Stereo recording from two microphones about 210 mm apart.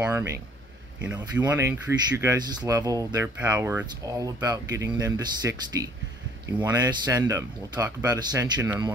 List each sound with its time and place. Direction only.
0.0 s speech: 15° right (ahead or behind)